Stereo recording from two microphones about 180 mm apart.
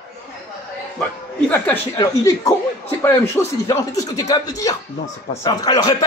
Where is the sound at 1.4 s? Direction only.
10° left (ahead or behind).